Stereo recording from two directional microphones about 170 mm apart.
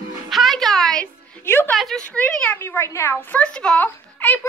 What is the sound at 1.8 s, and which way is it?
A woman's voice, centre (ahead or behind).